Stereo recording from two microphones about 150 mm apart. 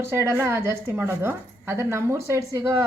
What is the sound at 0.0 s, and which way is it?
A woman's voice, 20° right (ahead or behind).